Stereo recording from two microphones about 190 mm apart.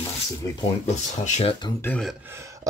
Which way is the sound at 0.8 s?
35° left (ahead or behind).